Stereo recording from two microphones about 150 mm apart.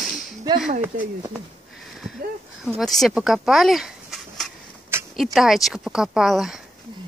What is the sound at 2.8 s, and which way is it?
Speech, centre (ahead or behind).